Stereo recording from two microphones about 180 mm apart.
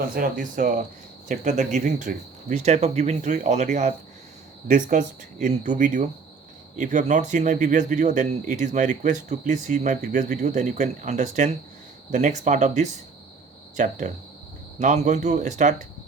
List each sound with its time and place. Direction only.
0.0 s speech: 50° right (ahead or behind)